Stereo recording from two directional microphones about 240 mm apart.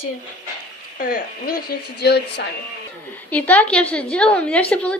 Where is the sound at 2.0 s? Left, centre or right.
Left.